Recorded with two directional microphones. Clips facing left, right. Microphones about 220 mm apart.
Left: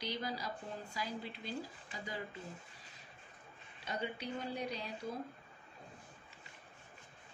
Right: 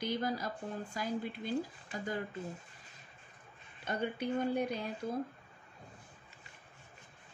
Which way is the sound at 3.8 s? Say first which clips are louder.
Right 5 dB; 50° right (ahead or behind).